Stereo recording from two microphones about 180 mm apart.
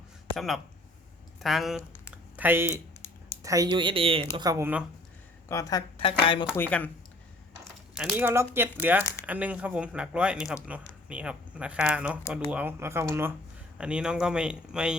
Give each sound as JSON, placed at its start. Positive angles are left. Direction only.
{"t": 0.3, "sound": "speech", "side_deg": 0}
{"t": 5.5, "sound": "speech", "side_deg": 20}
{"t": 6.0, "sound": "speech", "side_deg": 30}
{"t": 6.6, "sound": "speech", "side_deg": 10}
{"t": 7.9, "sound": "speech", "side_deg": -10}